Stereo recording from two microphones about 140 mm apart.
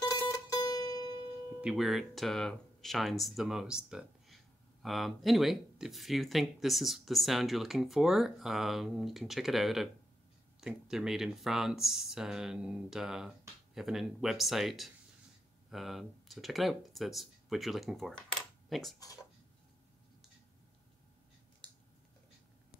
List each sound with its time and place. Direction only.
0.1 s music: 25° left (ahead or behind)
1.6 s speech: centre (ahead or behind)